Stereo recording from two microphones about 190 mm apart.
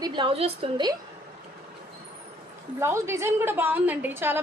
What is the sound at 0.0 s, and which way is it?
Speech, 25° right (ahead or behind).